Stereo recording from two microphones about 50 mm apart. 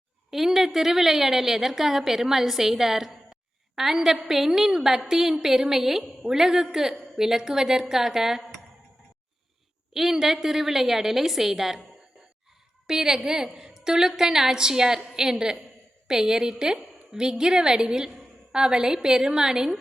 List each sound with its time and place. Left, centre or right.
0.3 s a woman's voice: centre
9.9 s a woman's voice: centre
12.9 s a woman's voice: centre